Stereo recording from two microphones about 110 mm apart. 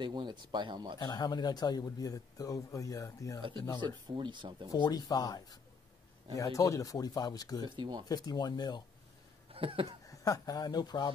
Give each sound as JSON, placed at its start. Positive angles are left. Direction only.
{"t": 0.0, "sound": "speech", "side_deg": -45}
{"t": 0.9, "sound": "speech", "side_deg": 40}
{"t": 3.8, "sound": "speech", "side_deg": -45}
{"t": 4.8, "sound": "speech", "side_deg": 40}
{"t": 7.6, "sound": "speech", "side_deg": -45}
{"t": 8.1, "sound": "speech", "side_deg": 35}
{"t": 9.5, "sound": "a sound", "side_deg": -55}
{"t": 10.0, "sound": "speech", "side_deg": 35}